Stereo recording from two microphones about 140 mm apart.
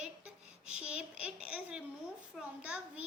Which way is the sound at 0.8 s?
5° right (ahead or behind).